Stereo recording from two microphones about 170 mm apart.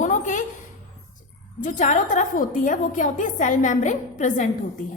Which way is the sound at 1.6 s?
50° left (ahead or behind).